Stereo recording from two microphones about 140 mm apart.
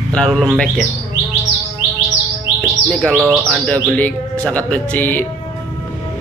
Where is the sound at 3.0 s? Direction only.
5° left (ahead or behind).